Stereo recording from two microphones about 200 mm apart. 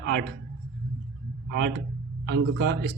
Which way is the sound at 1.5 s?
60° right (ahead or behind).